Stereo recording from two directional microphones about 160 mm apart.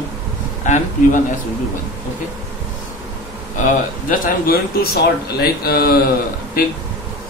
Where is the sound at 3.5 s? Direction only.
55° left (ahead or behind); by 6.0 s 70° left (ahead or behind).